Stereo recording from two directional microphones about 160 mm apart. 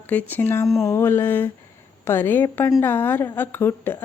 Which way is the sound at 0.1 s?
10° left (ahead or behind).